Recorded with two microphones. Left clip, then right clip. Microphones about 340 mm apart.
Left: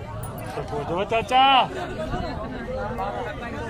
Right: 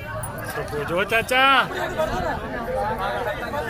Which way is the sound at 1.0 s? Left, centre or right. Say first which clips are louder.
Even; left.